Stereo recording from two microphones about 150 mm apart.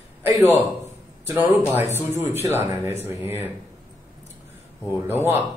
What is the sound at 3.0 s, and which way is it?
Speech, 15° right (ahead or behind).